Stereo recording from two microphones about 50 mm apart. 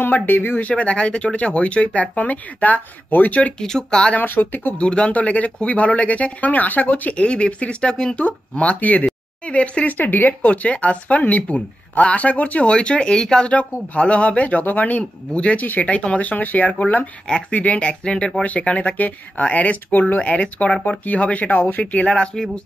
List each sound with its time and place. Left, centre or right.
0.0 s speech: left
0.6 s speech: left
3.5 s speech: centre
4.0 s speech: left
4.3 s speech: left
4.7 s speech: left
9.9 s speech: left
20.2 s speech: left
22.0 s speech: centre